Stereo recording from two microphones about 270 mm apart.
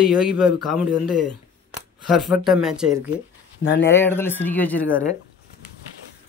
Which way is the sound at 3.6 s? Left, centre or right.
Left.